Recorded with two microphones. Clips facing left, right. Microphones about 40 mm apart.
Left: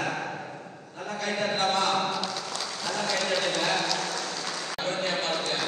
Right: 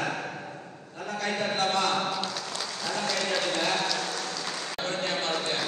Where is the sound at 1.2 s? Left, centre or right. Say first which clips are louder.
Left 1 dB; left.